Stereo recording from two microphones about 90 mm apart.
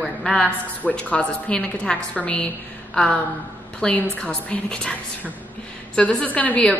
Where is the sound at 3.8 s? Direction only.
15° left (ahead or behind).